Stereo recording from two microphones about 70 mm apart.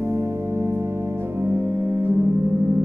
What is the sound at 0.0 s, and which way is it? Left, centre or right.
Organ, right.